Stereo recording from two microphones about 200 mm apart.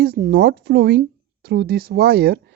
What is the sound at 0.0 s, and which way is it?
Speech, 50° right (ahead or behind).